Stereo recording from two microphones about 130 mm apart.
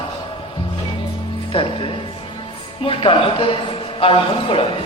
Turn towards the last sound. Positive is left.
turn(degrees=45)  # may be behind; listen again after turning